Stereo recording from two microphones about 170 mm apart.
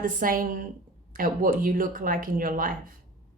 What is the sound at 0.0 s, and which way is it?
Speech, 55° right (ahead or behind).